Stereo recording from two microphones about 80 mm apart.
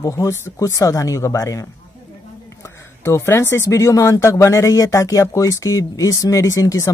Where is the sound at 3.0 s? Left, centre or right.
Left.